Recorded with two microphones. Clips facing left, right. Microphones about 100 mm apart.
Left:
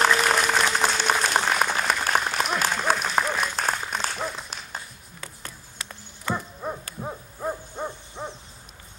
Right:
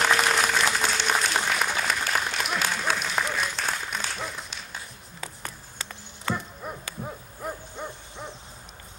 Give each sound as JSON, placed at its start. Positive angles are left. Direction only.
{"t": 0.0, "sound": "applause", "side_deg": 40}
{"t": 6.3, "sound": "dog", "side_deg": 40}
{"t": 7.0, "sound": "hoot", "side_deg": 35}